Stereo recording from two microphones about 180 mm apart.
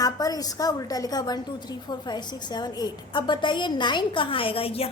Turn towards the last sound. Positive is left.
turn(degrees=30)  # may be behind; listen again after turning